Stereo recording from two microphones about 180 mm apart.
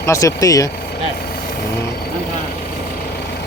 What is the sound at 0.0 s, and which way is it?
Speech, 15° left (ahead or behind).